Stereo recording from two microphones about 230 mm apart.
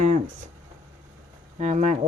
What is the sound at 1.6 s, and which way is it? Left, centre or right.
Speech, right.